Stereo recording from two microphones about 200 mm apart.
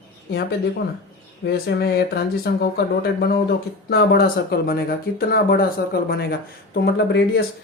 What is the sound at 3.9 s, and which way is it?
Speech, 55° left (ahead or behind).